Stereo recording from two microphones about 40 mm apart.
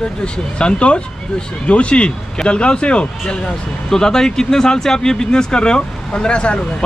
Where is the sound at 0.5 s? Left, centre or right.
Left.